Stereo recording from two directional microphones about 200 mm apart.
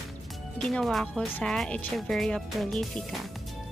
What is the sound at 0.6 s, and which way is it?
Speech, centre (ahead or behind).